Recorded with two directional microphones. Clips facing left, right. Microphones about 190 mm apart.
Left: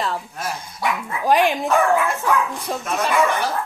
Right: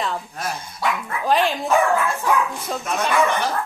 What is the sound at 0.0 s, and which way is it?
Speech, centre (ahead or behind).